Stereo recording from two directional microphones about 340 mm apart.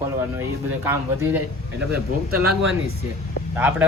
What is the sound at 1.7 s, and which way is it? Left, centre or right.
Speech, right.